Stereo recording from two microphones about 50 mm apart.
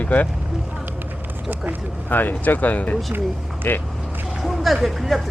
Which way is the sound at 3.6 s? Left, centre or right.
Left.